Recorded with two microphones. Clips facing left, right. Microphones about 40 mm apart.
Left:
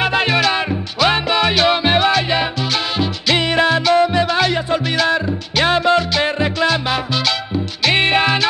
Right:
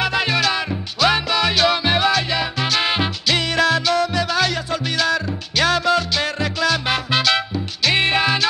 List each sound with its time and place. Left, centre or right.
0.0 s music: left
7.8 s music: centre